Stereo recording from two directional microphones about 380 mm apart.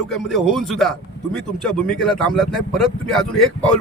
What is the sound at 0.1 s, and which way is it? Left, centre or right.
A man's voice, centre.